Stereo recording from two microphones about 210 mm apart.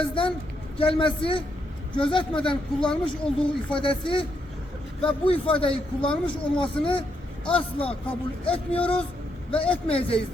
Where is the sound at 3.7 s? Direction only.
25° left (ahead or behind).